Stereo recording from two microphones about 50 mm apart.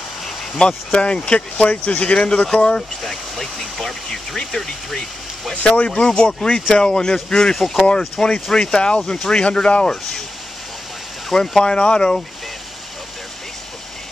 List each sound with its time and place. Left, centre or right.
0.6 s speech: centre
3.0 s speech: centre
5.5 s speech: left
7.5 s speech: centre
8.5 s speech: centre
11.2 s speech: centre